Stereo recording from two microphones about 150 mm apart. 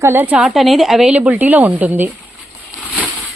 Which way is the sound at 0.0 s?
15° right (ahead or behind).